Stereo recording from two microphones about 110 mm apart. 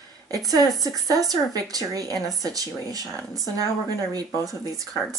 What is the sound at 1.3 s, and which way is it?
Speech, 35° right (ahead or behind).